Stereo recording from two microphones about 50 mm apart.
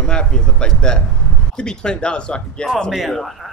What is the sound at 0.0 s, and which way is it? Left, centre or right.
Speech, centre.